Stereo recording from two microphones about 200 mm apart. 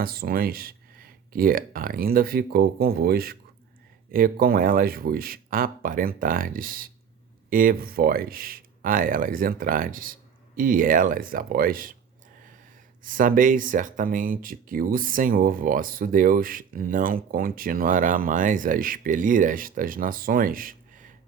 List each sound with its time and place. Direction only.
0.0 s speech: 50° right (ahead or behind)
13.0 s speech: 45° right (ahead or behind)